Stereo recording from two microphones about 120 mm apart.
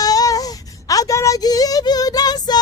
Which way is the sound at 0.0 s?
30° left (ahead or behind).